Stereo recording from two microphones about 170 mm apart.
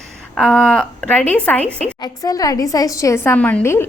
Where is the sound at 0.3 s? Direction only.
5° left (ahead or behind).